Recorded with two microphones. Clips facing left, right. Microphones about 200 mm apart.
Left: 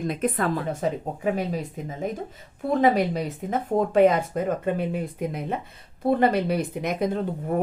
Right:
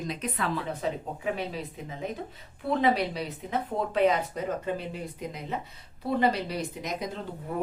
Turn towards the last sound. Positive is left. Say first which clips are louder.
# left 8 dB
turn(degrees=55)  # may be behind; listen again after turning